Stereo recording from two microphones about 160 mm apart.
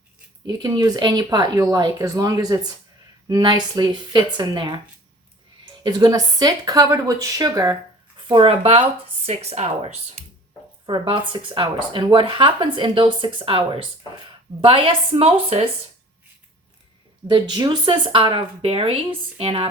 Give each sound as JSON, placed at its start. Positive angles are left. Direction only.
{"t": 0.4, "sound": "speech", "side_deg": -25}
{"t": 5.8, "sound": "speech", "side_deg": -25}
{"t": 8.3, "sound": "speech", "side_deg": -35}
{"t": 10.8, "sound": "speech", "side_deg": -30}
{"t": 17.2, "sound": "speech", "side_deg": -25}